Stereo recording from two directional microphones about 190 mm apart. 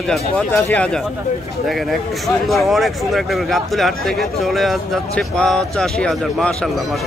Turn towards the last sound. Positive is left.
turn(degrees=0)  # may be behind; listen again after turning